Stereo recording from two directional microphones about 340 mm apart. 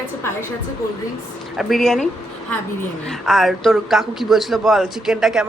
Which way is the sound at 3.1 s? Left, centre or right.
Centre.